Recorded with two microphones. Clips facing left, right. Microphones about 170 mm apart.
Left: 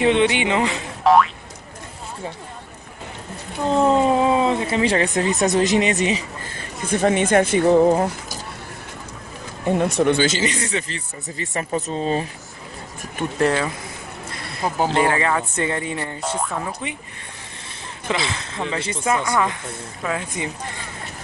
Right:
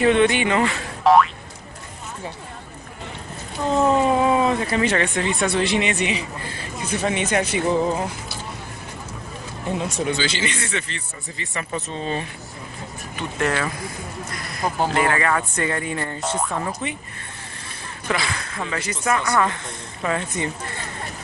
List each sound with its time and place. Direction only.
0.0 s speech: 15° left (ahead or behind)
1.0 s boing: centre (ahead or behind)
3.8 s speech: 25° left (ahead or behind); by 8.4 s 50° left (ahead or behind)
9.8 s speech: 60° left (ahead or behind); by 12.3 s 35° left (ahead or behind)
13.4 s speech: 25° left (ahead or behind)
14.3 s a sound: 30° left (ahead or behind)
14.9 s speech: 25° left (ahead or behind)
16.3 s speech: centre (ahead or behind)
18.0 s speech: 25° left (ahead or behind)